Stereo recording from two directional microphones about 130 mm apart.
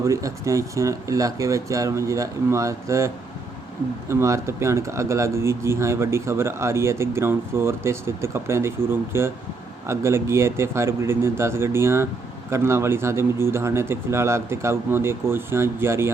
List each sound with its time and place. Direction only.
0.0 s speech: 25° right (ahead or behind)
4.1 s speech: 20° right (ahead or behind)